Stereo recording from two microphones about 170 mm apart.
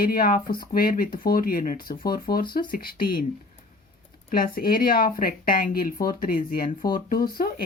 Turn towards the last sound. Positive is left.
turn(degrees=60)  # may be behind; listen again after turning